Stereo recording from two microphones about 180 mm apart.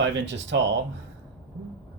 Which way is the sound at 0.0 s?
85° right.